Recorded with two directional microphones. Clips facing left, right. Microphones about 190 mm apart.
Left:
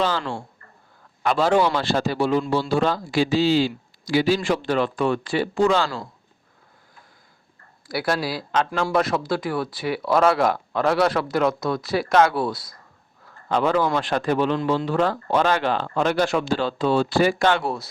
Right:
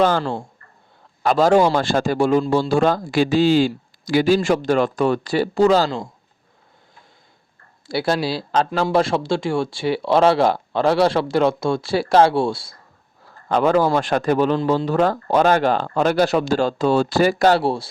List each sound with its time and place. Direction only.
1.2 s a man's voice: 40° right (ahead or behind)
7.9 s speech: 25° right (ahead or behind)
13.5 s a man's voice: 45° right (ahead or behind); by 17.8 s 30° right (ahead or behind)